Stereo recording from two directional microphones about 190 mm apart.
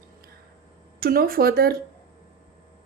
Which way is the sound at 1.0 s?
50° right (ahead or behind).